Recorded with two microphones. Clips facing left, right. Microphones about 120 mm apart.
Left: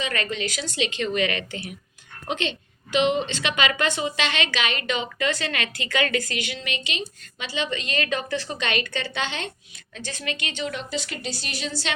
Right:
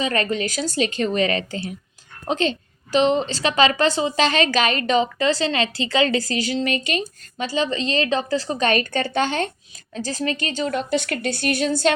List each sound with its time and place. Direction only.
0.0 s a woman's voice: 35° right (ahead or behind)